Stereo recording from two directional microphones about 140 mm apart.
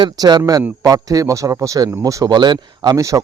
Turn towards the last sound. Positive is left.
turn(degrees=-25)  # may be behind; listen again after turning